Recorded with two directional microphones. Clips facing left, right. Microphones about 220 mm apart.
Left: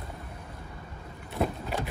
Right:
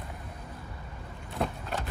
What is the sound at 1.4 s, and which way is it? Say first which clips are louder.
Vehicle: left 3 dB; 5° left (ahead or behind).